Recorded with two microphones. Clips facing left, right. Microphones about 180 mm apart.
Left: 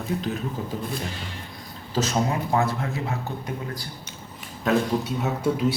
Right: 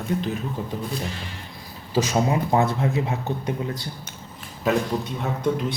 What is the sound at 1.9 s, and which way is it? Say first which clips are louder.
Speech: right 3 dB; 10° right (ahead or behind).